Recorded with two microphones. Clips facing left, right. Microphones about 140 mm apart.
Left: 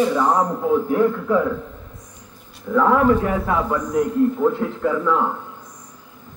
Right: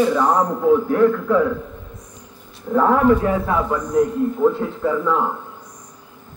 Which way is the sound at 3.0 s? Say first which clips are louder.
Right 2 dB; 30° right (ahead or behind).